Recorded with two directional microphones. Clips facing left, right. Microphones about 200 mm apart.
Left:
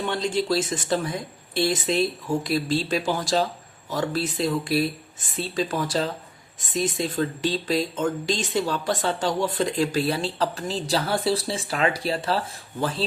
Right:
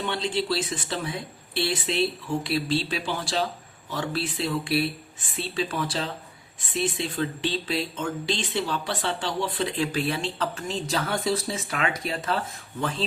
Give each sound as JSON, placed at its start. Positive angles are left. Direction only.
{"t": 0.0, "sound": "speech", "side_deg": 45}